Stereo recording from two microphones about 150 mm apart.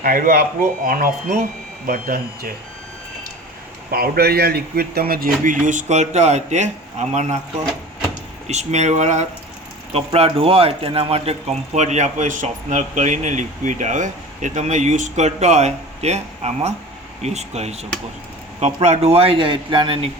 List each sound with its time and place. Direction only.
0.0 s speech: 70° right (ahead or behind)
1.9 s speech: 75° right (ahead or behind)
3.9 s speech: 90° right; by 7.3 s 50° right (ahead or behind)
8.4 s speech: 50° right (ahead or behind)